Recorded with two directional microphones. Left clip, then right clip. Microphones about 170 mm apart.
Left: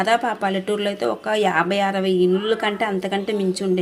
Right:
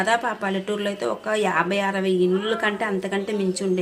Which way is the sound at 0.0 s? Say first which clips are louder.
Left 3 dB; 15° left (ahead or behind).